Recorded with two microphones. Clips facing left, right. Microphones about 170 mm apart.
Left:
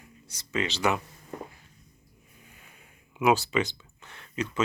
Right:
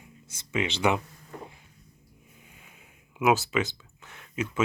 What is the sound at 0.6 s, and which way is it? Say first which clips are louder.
Speech: right 1 dB; 15° right (ahead or behind).